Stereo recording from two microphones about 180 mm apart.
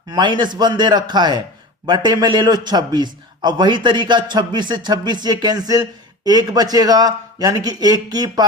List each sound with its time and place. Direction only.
0.1 s a man's voice: 25° right (ahead or behind)